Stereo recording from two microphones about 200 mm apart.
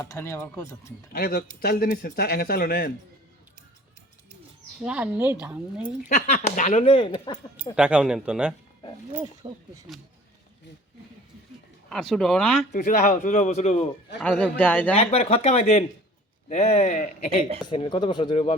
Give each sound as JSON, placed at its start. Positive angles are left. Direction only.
{"t": 0.0, "sound": "speech", "side_deg": 15}
{"t": 1.1, "sound": "a man's voice", "side_deg": 50}
{"t": 4.8, "sound": "speech", "side_deg": -5}
{"t": 6.1, "sound": "speech", "side_deg": 35}
{"t": 7.8, "sound": "speech", "side_deg": -5}
{"t": 9.1, "sound": "speech", "side_deg": -15}
{"t": 11.9, "sound": "speech", "side_deg": 0}
{"t": 12.7, "sound": "speech", "side_deg": 40}
{"t": 14.2, "sound": "speech", "side_deg": 5}
{"t": 14.9, "sound": "speech", "side_deg": 30}